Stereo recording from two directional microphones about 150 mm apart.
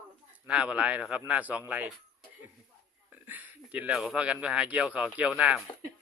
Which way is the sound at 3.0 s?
10° right (ahead or behind).